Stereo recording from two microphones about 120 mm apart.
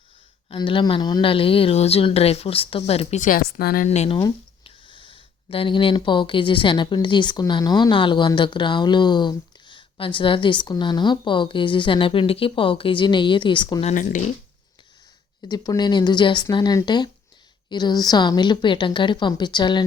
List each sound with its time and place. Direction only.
0.5 s speech: 45° left (ahead or behind); by 4.2 s 65° left (ahead or behind)
4.6 s speech: 45° left (ahead or behind)
13.8 s speech: 90° left
15.4 s speech: 35° left (ahead or behind)